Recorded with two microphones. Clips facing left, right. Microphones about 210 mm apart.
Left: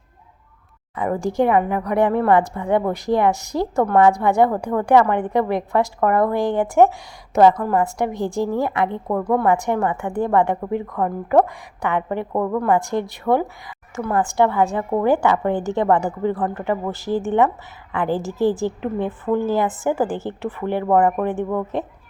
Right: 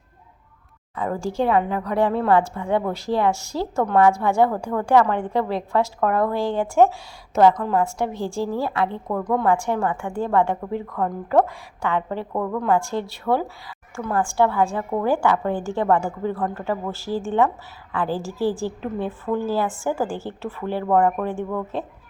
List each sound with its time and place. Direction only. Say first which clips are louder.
0.9 s a woman's voice: left 4 dB; 20° left (ahead or behind)
7.9 s a woman's voice: left 3 dB; 15° left (ahead or behind)